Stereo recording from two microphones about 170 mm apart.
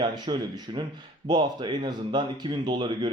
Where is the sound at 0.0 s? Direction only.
25° right (ahead or behind).